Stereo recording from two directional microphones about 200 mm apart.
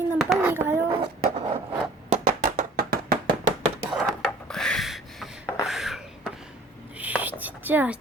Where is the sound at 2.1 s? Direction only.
40° right (ahead or behind).